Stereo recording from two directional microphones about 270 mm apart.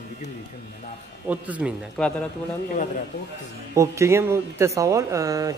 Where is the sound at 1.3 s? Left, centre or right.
Centre.